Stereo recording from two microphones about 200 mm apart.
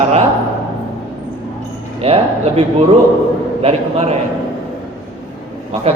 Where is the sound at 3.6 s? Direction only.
30° right (ahead or behind).